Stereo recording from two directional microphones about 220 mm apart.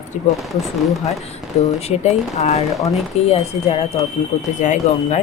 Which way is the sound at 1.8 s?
30° left (ahead or behind).